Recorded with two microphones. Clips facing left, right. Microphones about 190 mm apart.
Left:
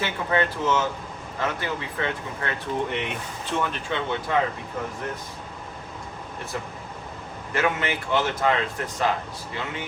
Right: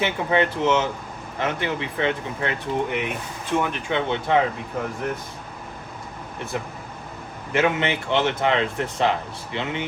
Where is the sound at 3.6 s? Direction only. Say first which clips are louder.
Right 3 dB; 15° right (ahead or behind).